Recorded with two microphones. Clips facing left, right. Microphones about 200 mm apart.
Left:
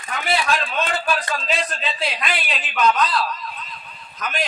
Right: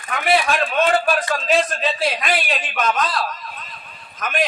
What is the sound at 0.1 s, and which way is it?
A man's voice, 55° right (ahead or behind).